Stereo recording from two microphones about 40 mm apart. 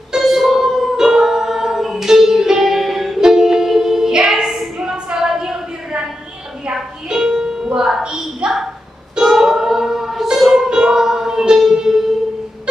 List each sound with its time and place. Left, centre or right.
0.1 s music: centre
3.2 s music: centre
4.7 s a sound: centre
6.7 s music: centre
8.4 s a sound: right
9.1 s music: centre